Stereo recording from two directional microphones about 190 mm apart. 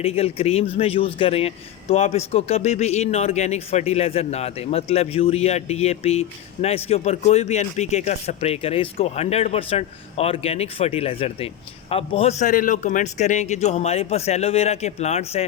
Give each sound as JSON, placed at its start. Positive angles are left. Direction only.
{"t": 0.0, "sound": "a man's voice", "side_deg": 30}